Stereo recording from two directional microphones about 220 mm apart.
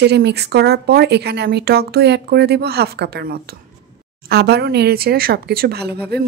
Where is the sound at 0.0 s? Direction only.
50° right (ahead or behind).